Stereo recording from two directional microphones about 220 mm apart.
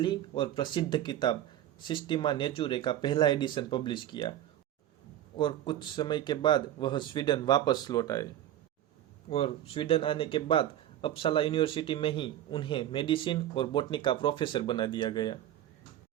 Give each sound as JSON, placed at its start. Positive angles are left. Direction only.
{"t": 0.0, "sound": "speech", "side_deg": 20}
{"t": 5.4, "sound": "speech", "side_deg": 20}
{"t": 9.3, "sound": "speech", "side_deg": 25}